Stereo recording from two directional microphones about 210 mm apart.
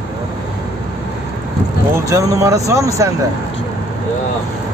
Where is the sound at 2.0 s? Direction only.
15° right (ahead or behind).